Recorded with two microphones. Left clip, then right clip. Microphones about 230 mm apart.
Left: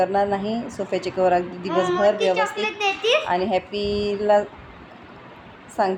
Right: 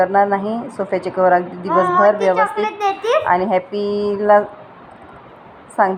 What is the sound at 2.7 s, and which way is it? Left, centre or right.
Speech, centre.